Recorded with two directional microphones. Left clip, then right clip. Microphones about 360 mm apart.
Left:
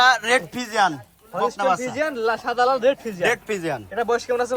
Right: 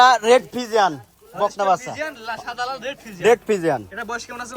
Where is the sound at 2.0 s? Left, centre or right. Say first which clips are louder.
Left 6 dB; centre.